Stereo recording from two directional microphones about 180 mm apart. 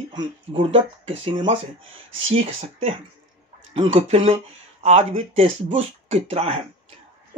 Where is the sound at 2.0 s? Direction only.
90° right.